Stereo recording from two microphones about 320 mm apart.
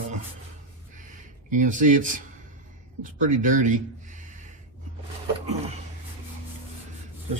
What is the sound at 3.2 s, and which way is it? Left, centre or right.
Speech, right.